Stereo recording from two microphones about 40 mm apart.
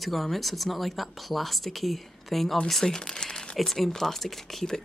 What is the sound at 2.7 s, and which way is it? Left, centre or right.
Speech, centre.